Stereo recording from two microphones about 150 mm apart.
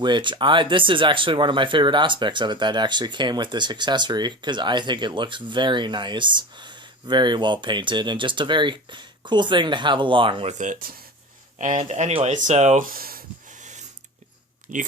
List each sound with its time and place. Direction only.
0.0 s speech: 30° right (ahead or behind)
10.5 s speech: 55° right (ahead or behind)
11.6 s speech: 55° right (ahead or behind)
12.8 s speech: 75° right (ahead or behind)
13.6 s a sound: 55° right (ahead or behind)